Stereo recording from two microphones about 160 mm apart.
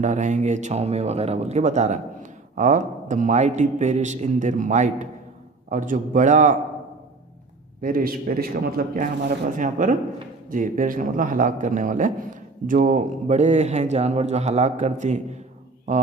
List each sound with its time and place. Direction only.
0.0 s a man's voice: 50° right (ahead or behind)
7.8 s a man's voice: 65° right (ahead or behind)